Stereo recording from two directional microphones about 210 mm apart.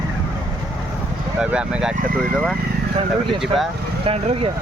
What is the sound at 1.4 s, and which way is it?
Speech, 5° right (ahead or behind).